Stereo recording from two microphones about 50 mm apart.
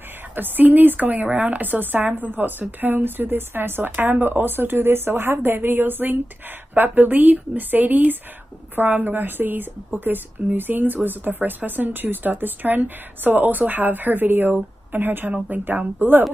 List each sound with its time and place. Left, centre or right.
0.4 s speech: right